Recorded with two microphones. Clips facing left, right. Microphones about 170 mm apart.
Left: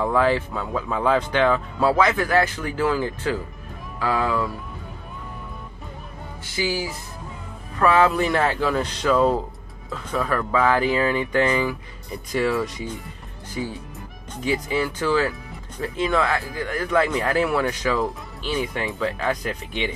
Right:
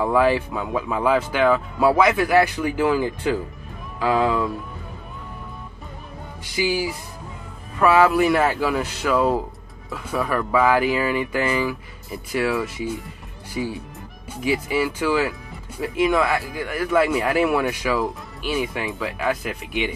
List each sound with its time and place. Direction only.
0.0 s speech: 10° right (ahead or behind)
6.4 s speech: 15° right (ahead or behind)
14.3 s speech: 10° right (ahead or behind)